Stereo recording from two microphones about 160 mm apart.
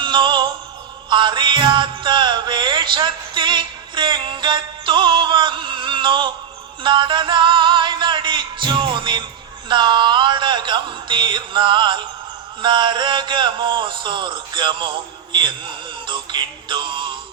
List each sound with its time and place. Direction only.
0.0 s music: 30° right (ahead or behind)